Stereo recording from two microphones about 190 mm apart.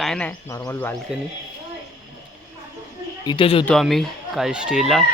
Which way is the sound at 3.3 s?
25° left (ahead or behind).